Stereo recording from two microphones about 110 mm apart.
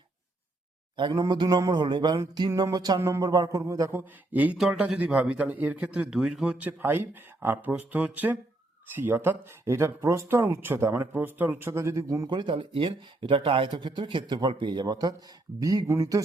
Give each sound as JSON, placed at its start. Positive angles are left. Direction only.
{"t": 0.9, "sound": "speech", "side_deg": -45}
{"t": 1.2, "sound": "music", "side_deg": -40}
{"t": 3.9, "sound": "a man's voice", "side_deg": -15}
{"t": 12.3, "sound": "speech", "side_deg": -45}
{"t": 14.3, "sound": "music", "side_deg": -45}